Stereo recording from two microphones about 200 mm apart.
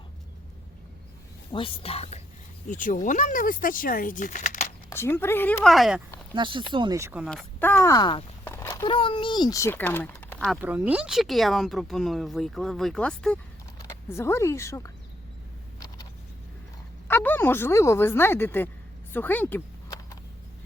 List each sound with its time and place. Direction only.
1.5 s speech: 25° left (ahead or behind)
4.9 s speech: 10° left (ahead or behind)
6.3 s speech: 25° right (ahead or behind)
7.3 s a child's voice: 5° left (ahead or behind)
10.6 s speech: 10° right (ahead or behind); by 14.9 s 15° left (ahead or behind)
17.1 s speech: 10° left (ahead or behind)
19.1 s a sound: 10° left (ahead or behind)